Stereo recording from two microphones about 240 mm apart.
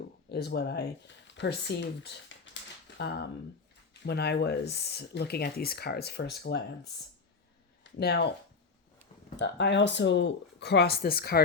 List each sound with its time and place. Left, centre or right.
0.3 s speech: left
9.4 s speech: left